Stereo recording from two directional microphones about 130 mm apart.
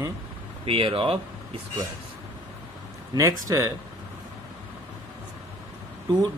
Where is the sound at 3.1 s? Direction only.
20° right (ahead or behind).